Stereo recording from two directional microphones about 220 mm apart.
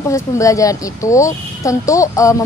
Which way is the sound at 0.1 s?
15° left (ahead or behind).